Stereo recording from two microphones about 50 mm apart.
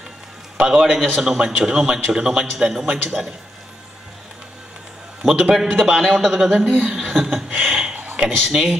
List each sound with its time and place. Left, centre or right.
0.6 s a man's voice: centre
5.2 s a man's voice: centre
6.6 s speech: right
6.9 s a man's voice: centre
7.6 s a sound: centre
7.9 s a sound: right
8.2 s a man's voice: centre